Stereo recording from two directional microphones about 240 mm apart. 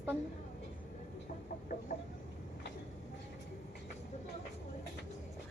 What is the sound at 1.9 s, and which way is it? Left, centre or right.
Vehicle, left.